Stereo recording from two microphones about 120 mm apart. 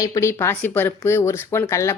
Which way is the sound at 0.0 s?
25° left (ahead or behind).